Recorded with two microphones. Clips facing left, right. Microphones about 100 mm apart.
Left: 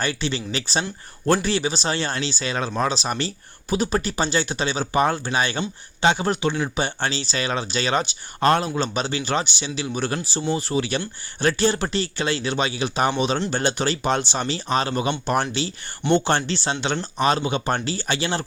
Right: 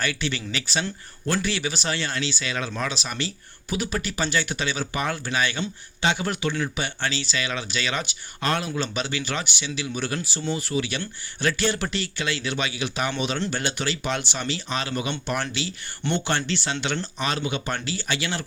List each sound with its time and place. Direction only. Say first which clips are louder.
0.0 s speech: left 2 dB; 30° left (ahead or behind)